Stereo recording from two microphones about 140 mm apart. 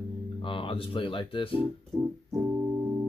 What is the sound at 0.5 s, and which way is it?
Speech, 40° left (ahead or behind).